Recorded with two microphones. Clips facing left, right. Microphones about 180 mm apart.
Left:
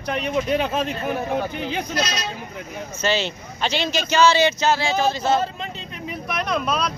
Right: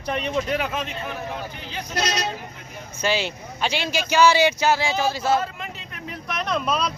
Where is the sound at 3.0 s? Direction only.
10° right (ahead or behind).